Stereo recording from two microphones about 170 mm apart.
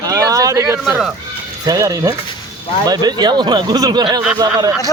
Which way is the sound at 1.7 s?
20° right (ahead or behind).